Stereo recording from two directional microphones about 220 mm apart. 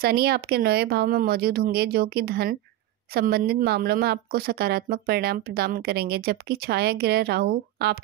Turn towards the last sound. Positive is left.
turn(degrees=-45)  # may be behind; listen again after turning